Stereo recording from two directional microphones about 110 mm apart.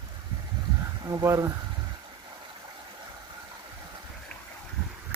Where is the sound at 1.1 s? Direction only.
30° right (ahead or behind).